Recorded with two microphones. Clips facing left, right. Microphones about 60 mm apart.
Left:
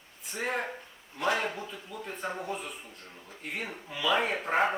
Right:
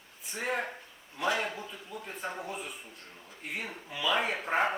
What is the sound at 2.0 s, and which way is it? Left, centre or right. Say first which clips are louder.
Speech: left 3 dB; centre.